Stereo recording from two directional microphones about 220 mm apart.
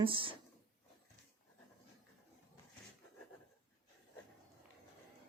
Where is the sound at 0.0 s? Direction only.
25° right (ahead or behind).